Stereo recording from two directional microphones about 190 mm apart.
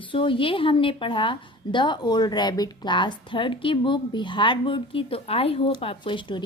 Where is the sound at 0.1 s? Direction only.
25° left (ahead or behind).